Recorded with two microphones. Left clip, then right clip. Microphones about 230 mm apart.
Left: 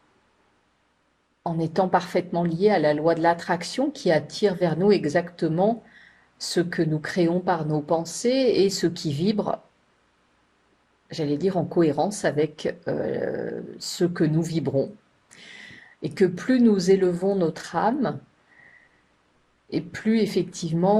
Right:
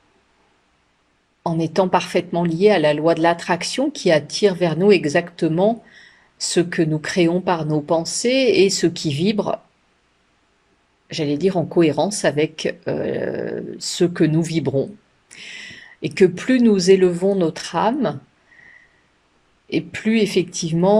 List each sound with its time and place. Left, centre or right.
1.5 s speech: right
11.1 s speech: right
12.9 s speech: right
13.9 s speech: right
19.7 s speech: right